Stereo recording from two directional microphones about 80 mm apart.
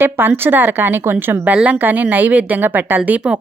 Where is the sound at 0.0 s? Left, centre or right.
Right.